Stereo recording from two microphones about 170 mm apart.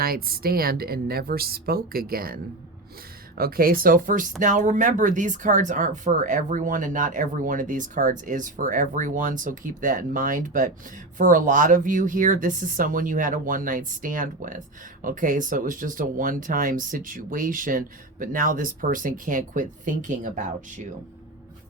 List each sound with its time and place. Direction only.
0.0 s speech: 60° right (ahead or behind)